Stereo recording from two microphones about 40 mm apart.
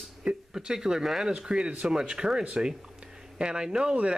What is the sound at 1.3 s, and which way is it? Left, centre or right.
Speech, right.